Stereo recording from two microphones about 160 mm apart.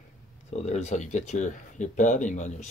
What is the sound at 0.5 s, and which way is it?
Speech, 45° left (ahead or behind).